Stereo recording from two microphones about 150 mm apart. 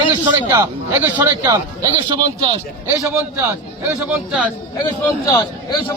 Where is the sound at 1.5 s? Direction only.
25° right (ahead or behind).